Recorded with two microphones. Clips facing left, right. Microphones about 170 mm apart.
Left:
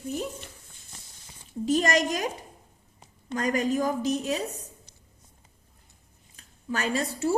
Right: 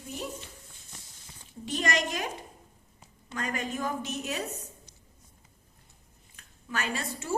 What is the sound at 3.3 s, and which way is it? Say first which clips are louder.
A woman's voice: left 8 dB; 40° left (ahead or behind).